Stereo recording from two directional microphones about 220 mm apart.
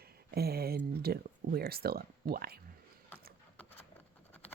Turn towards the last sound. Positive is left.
turn(degrees=10)  # may be behind; listen again after turning